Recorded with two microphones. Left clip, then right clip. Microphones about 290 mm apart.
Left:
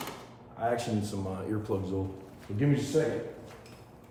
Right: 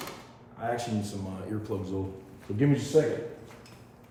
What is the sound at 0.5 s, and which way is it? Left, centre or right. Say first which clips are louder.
A man's voice: left 1 dB; centre.